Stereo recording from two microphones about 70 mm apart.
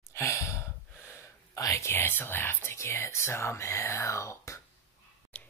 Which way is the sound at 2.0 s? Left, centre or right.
Left.